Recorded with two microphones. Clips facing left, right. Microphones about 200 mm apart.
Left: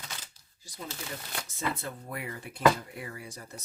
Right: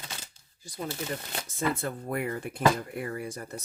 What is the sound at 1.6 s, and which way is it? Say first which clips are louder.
Speech: right 5 dB; 50° right (ahead or behind).